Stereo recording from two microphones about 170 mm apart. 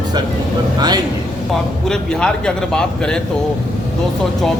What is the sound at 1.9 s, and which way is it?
A man's voice, 5° left (ahead or behind).